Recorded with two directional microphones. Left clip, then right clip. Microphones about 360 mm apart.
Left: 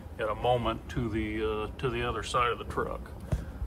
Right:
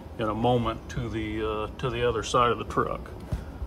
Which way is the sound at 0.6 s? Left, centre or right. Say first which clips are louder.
Right 1 dB; centre.